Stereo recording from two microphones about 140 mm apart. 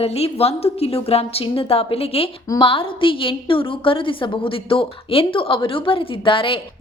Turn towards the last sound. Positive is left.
turn(degrees=40)  # may be behind; listen again after turning